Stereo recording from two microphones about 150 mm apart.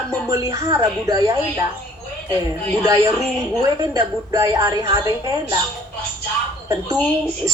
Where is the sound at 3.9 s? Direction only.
25° right (ahead or behind).